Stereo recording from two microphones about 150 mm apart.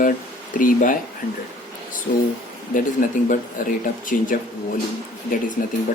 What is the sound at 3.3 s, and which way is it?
Speech, 65° left (ahead or behind).